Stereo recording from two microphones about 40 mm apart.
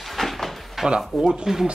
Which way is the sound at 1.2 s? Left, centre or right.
Centre.